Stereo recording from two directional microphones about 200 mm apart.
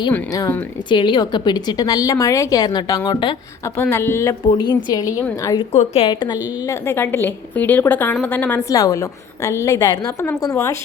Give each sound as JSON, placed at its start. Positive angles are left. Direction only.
{"t": 0.1, "sound": "speech", "side_deg": 10}
{"t": 3.8, "sound": "a woman's voice", "side_deg": 10}
{"t": 5.7, "sound": "a woman's voice", "side_deg": 30}